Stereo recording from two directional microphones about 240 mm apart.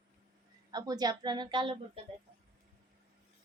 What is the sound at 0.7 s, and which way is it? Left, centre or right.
Child singing, centre.